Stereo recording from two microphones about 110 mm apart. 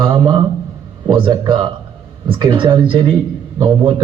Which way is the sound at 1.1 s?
50° right (ahead or behind).